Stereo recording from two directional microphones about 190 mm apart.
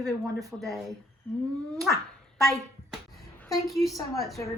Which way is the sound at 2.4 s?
Centre (ahead or behind).